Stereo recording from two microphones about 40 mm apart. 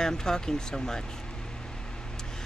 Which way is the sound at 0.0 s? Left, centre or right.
Centre.